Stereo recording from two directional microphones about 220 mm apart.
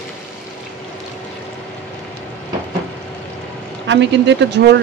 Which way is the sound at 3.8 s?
55° right (ahead or behind).